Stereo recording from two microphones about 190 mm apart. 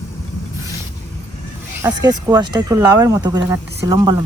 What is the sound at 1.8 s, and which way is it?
Speech, 20° right (ahead or behind).